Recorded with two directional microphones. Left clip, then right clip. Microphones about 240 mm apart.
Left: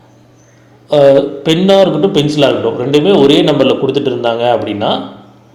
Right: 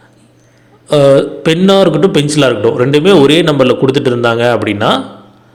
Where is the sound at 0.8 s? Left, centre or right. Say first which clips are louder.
Even; right.